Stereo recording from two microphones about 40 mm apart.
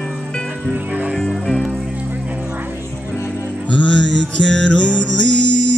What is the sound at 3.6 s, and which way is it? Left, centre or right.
Music, left.